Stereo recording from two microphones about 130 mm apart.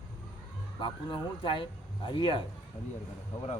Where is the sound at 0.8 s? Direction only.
40° left (ahead or behind).